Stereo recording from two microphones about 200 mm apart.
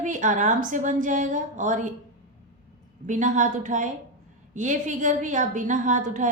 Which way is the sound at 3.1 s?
40° right (ahead or behind).